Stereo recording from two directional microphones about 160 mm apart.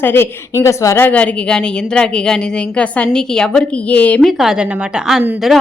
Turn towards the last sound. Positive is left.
turn(degrees=0)  # may be behind; listen again after turning